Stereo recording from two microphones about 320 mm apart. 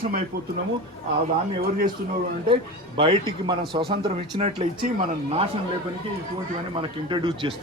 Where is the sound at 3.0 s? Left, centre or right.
Centre.